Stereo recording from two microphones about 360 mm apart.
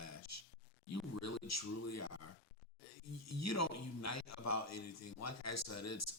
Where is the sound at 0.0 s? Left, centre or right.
Left.